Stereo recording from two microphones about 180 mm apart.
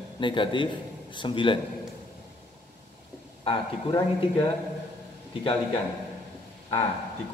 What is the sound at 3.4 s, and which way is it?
A man's voice, 30° left (ahead or behind).